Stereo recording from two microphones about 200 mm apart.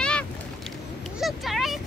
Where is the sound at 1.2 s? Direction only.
Centre (ahead or behind).